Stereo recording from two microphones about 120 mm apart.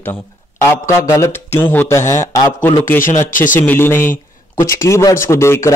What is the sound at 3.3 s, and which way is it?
Speech, 90° left.